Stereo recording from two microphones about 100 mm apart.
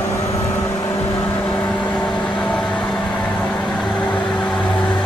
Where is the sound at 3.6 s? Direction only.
Centre (ahead or behind).